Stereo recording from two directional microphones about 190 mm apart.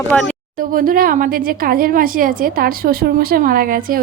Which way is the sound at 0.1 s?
5° left (ahead or behind).